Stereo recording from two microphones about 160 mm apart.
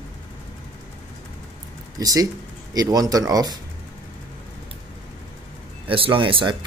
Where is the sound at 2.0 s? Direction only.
20° right (ahead or behind).